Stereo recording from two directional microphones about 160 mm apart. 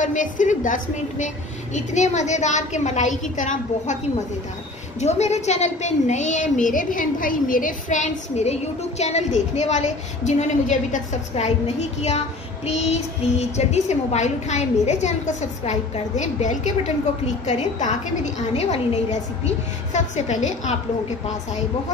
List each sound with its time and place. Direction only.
0.0 s a woman's voice: 50° left (ahead or behind)
5.0 s a woman's voice: 45° left (ahead or behind)